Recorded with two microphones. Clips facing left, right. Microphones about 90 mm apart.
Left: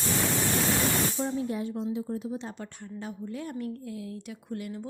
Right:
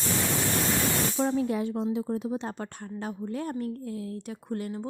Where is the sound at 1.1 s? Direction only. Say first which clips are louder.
Right 4 dB; 75° right (ahead or behind).